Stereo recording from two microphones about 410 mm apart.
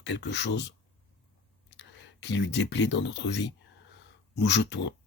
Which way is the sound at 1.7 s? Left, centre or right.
Left.